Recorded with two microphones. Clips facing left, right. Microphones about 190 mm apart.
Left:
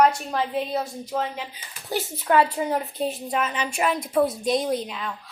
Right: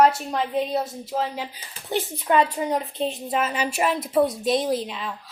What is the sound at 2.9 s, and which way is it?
Speech, 20° right (ahead or behind).